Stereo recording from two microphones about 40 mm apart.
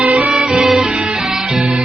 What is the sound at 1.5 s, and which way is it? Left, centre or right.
Music, right.